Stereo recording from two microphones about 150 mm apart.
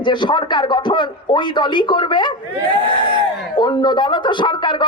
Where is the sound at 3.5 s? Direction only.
30° left (ahead or behind).